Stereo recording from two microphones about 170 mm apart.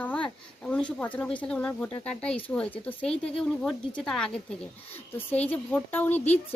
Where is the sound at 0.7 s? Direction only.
5° left (ahead or behind).